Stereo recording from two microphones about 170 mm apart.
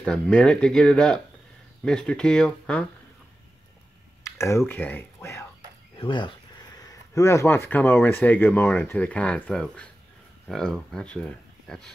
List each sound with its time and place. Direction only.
0.0 s speech: 5° left (ahead or behind)
4.2 s a sound: 15° left (ahead or behind)
5.9 s speech: 30° left (ahead or behind); by 11.9 s 5° left (ahead or behind)